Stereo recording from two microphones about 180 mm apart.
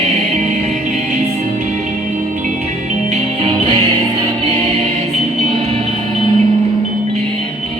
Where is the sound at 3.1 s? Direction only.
30° right (ahead or behind).